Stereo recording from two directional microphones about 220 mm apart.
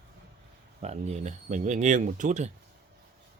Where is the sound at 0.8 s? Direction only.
30° right (ahead or behind).